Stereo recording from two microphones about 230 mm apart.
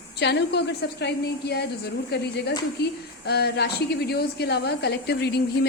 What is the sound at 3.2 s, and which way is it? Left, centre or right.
A woman's voice, left.